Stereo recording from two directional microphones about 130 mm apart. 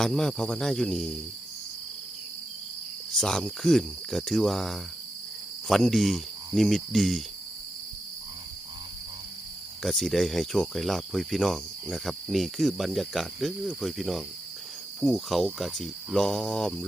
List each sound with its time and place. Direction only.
0.0 s speech: 5° left (ahead or behind)
3.2 s speech: 5° left (ahead or behind)
9.8 s speech: 5° left (ahead or behind)